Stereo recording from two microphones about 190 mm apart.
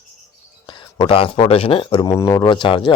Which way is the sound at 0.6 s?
25° left (ahead or behind).